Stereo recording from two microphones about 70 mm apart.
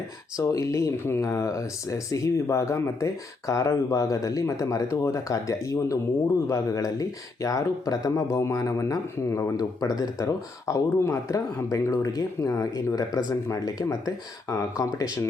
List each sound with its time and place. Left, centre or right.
0.3 s speech: left
1.0 s speech: left
8.4 s speech: left
9.6 s speech: left
10.8 s speech: left
11.9 s speech: left
14.5 s speech: left